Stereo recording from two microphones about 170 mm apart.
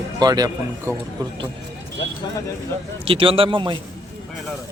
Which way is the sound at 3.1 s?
30° right (ahead or behind).